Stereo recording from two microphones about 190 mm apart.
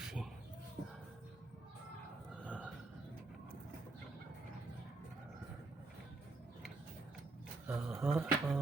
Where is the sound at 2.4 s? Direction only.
5° right (ahead or behind).